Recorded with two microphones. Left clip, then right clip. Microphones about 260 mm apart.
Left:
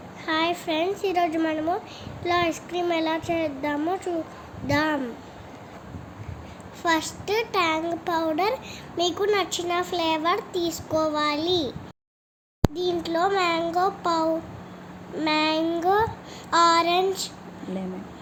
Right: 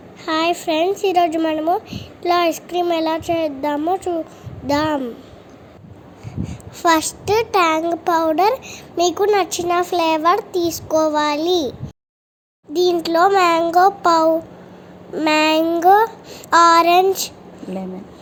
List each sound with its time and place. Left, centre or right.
0.3 s a child's voice: right
6.5 s a child's voice: right
12.7 s child singing: right